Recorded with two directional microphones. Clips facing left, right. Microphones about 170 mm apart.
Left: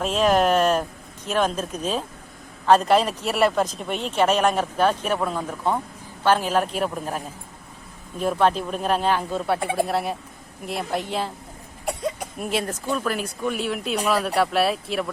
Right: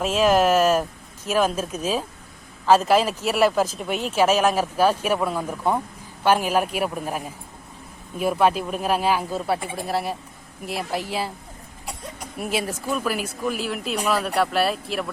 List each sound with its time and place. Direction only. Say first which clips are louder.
0.0 s speech: right 1 dB; centre (ahead or behind)
9.6 s speech: left 8 dB; 65° left (ahead or behind)
9.8 s speech: left 1 dB; centre (ahead or behind)
12.4 s speech: right 1 dB; 5° right (ahead or behind)